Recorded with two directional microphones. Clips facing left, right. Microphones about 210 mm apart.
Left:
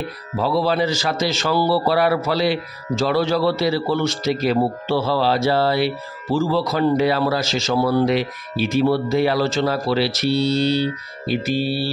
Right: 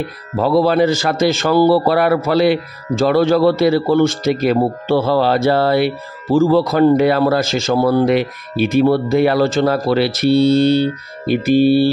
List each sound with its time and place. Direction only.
0.4 s a man's voice: 50° right (ahead or behind)